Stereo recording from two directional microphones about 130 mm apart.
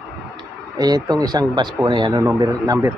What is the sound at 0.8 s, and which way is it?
Speech, 30° right (ahead or behind).